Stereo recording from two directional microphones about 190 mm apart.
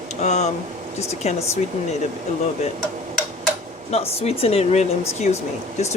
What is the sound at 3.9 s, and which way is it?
Speech, 30° left (ahead or behind).